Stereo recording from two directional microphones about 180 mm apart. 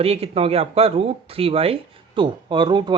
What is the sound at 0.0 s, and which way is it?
Speech, 35° right (ahead or behind).